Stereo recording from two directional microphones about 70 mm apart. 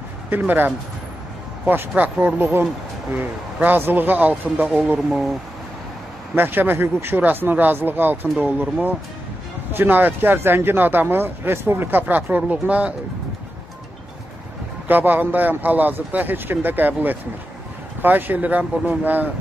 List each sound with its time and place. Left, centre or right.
0.3 s speech: right
6.3 s speech: right
9.7 s speech: right
14.9 s speech: right